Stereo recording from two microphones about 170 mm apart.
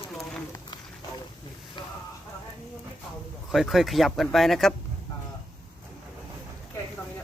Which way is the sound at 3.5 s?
Centre (ahead or behind).